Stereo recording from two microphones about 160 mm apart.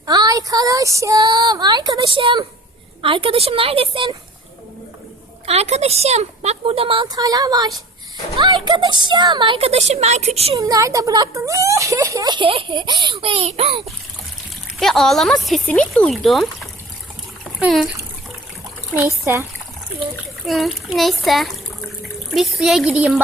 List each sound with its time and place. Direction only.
0.0 s a woman's voice: 25° right (ahead or behind)
5.5 s a woman's voice: 40° right (ahead or behind)
7.2 s a woman's voice: 20° right (ahead or behind); by 10.6 s 40° right (ahead or behind)
10.6 s speech: 20° right (ahead or behind); by 13.9 s 35° right (ahead or behind)
14.8 s speech: centre (ahead or behind)
18.9 s a child's voice: 15° right (ahead or behind)
20.5 s a child's voice: centre (ahead or behind)